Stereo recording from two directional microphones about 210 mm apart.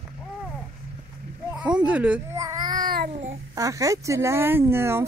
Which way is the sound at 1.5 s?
5° right (ahead or behind).